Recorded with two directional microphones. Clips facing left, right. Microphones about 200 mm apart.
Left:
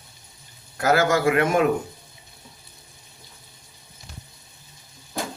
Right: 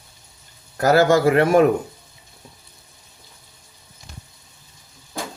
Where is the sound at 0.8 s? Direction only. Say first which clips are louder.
Right 5 dB; 35° right (ahead or behind).